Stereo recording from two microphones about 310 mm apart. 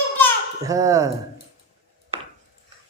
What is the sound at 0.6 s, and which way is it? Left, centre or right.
Speech, centre.